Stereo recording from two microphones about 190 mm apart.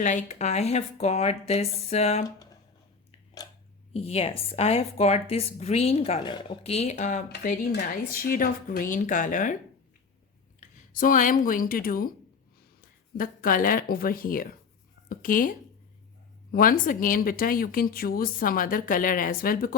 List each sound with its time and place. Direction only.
0.0 s a woman's voice: 40° left (ahead or behind)
3.9 s a woman's voice: 30° left (ahead or behind)
7.7 s speech: 50° left (ahead or behind)
10.9 s speech: 45° left (ahead or behind)
13.1 s speech: 45° left (ahead or behind)